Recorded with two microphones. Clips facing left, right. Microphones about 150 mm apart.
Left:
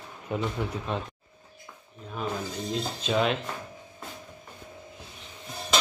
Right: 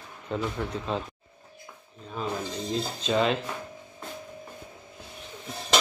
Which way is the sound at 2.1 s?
Centre (ahead or behind).